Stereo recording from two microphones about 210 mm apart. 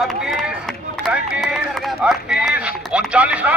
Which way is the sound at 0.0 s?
Centre (ahead or behind).